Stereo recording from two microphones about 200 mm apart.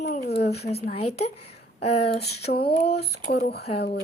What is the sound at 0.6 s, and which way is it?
Speech, 30° left (ahead or behind).